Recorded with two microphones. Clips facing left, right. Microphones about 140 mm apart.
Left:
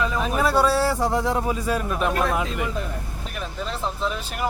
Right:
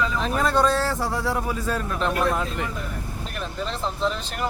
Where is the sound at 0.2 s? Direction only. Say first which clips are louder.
Left 1 dB; 5° left (ahead or behind).